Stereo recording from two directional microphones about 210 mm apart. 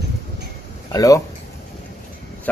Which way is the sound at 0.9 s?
15° left (ahead or behind).